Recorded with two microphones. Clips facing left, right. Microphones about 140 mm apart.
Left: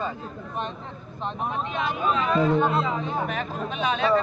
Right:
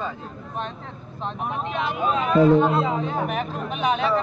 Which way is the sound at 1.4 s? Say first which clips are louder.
Right 1 dB; 10° right (ahead or behind).